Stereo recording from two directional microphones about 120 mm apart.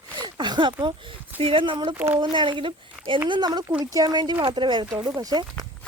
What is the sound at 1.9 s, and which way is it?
Speech, 15° right (ahead or behind).